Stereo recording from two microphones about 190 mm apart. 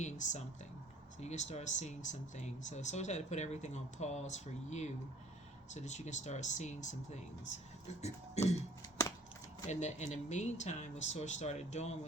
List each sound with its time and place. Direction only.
0.0 s speech: 40° left (ahead or behind)
9.6 s speech: 40° left (ahead or behind)